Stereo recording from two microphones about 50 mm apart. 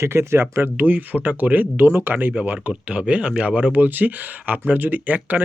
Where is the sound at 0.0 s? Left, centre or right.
Right.